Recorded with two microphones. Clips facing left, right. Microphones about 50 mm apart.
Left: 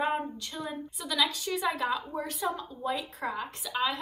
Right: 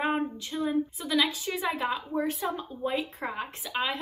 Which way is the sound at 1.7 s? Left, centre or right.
Right.